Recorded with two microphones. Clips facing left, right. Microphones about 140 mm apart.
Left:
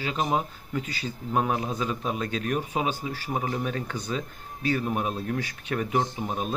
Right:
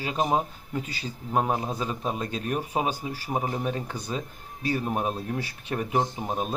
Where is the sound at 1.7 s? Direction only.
35° right (ahead or behind).